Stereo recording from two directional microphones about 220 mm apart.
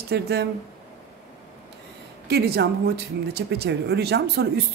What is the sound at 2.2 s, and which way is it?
Speech, 50° right (ahead or behind).